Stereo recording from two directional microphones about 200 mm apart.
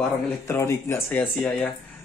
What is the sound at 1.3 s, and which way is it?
Speech, centre (ahead or behind).